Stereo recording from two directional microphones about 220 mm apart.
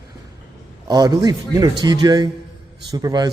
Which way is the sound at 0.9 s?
15° right (ahead or behind).